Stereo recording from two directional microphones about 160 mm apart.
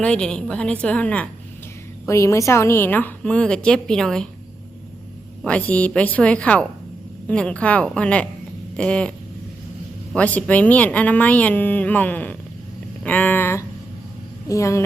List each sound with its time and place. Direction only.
0.0 s speech: 5° left (ahead or behind)
2.0 s speech: 20° left (ahead or behind)
5.4 s speech: 10° left (ahead or behind)
8.7 s cat: 5° left (ahead or behind)
10.2 s speech: 10° left (ahead or behind)
13.1 s a sound: 10° left (ahead or behind)
14.4 s speech: 20° left (ahead or behind)